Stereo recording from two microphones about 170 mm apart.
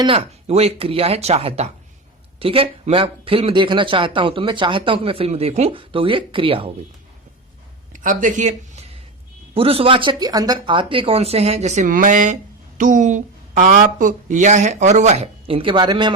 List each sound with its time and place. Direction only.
0.0 s speech: 35° right (ahead or behind)
7.9 s speech: 50° right (ahead or behind)
9.6 s speech: 35° right (ahead or behind)